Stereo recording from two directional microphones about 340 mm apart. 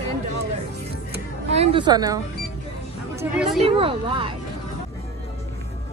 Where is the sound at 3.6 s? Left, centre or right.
Centre.